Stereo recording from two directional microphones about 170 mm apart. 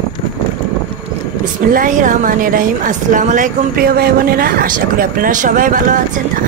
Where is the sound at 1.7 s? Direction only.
50° right (ahead or behind).